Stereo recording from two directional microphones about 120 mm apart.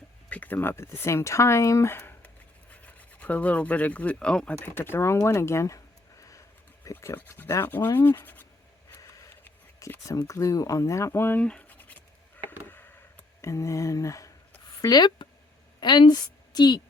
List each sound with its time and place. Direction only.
0.3 s speech: 15° left (ahead or behind)
8.9 s a sound: 20° left (ahead or behind)
14.8 s a woman's voice: 30° left (ahead or behind)